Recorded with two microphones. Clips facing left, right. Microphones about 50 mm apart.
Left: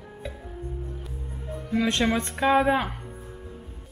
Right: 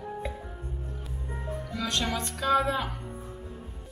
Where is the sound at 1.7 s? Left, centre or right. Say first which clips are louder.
Left 8 dB; left.